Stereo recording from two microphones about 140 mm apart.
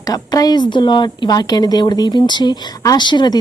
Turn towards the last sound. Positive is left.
turn(degrees=30)  # may be behind; listen again after turning